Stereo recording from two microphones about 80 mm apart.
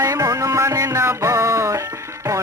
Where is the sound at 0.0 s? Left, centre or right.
Right.